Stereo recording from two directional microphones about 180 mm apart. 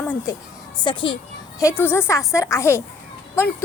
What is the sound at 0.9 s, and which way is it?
Speech, 25° left (ahead or behind).